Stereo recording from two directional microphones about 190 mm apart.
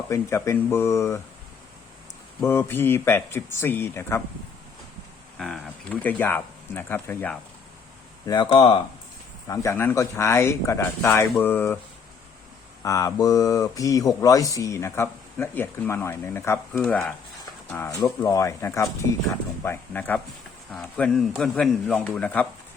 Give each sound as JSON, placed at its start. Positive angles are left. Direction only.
{"t": 0.1, "sound": "speech", "side_deg": 15}
{"t": 2.4, "sound": "speech", "side_deg": 10}
{"t": 5.4, "sound": "speech", "side_deg": 0}
{"t": 8.4, "sound": "speech", "side_deg": 30}
{"t": 9.5, "sound": "speech", "side_deg": 15}
{"t": 12.8, "sound": "speech", "side_deg": 15}